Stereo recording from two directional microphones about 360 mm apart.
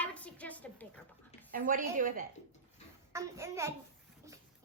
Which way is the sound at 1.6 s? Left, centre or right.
Right.